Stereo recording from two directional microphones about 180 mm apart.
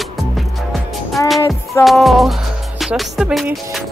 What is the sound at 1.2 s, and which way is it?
Music, 15° left (ahead or behind).